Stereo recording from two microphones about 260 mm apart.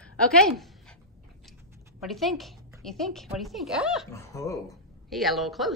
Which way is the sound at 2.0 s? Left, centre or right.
Centre.